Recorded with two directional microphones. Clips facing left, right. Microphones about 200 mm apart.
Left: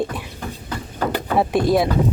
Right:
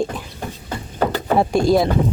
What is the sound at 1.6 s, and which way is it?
Speech, 25° right (ahead or behind).